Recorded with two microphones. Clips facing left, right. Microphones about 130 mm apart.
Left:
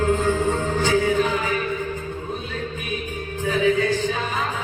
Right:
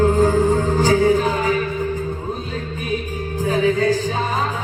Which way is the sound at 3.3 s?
40° right (ahead or behind).